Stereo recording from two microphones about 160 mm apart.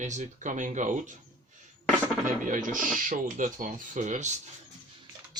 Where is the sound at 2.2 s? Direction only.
55° right (ahead or behind).